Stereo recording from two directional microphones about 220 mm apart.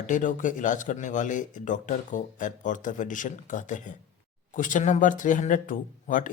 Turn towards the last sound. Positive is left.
turn(degrees=35)  # may be behind; listen again after turning